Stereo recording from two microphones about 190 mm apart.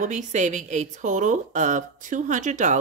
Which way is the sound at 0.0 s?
40° right (ahead or behind).